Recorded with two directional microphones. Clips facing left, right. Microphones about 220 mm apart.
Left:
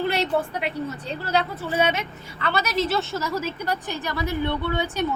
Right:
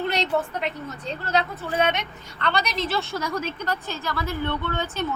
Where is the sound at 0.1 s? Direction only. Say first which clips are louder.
Left 1 dB; 10° left (ahead or behind).